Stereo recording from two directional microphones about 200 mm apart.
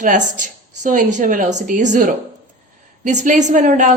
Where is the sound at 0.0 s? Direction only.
40° right (ahead or behind).